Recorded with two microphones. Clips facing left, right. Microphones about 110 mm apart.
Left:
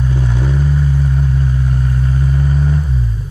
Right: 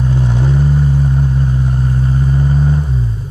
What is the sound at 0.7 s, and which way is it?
Vehicle, 30° right (ahead or behind).